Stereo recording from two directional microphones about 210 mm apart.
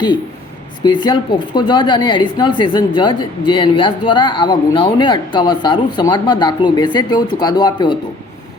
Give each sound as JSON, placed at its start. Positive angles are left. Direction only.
{"t": 0.9, "sound": "a woman's voice", "side_deg": 20}